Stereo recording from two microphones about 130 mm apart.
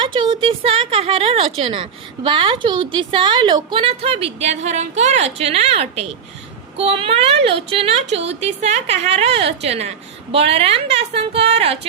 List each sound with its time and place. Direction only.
0.0 s a woman's voice: 40° right (ahead or behind)